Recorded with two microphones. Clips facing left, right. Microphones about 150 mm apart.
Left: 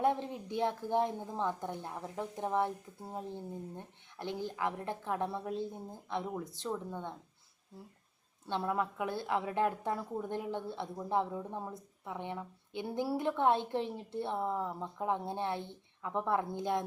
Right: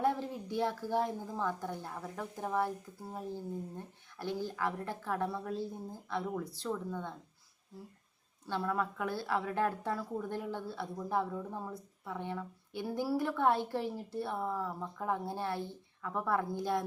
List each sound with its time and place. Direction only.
0.0 s a woman's voice: 20° left (ahead or behind)
8.4 s a woman's voice: 20° left (ahead or behind)